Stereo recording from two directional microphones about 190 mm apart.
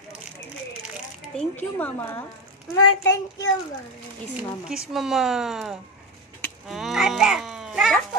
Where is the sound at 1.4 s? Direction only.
10° left (ahead or behind).